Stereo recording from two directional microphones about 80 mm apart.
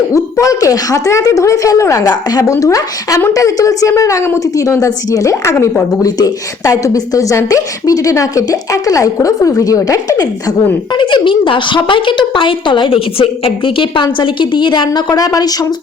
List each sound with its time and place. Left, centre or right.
0.1 s a woman's voice: left
10.9 s a woman's voice: left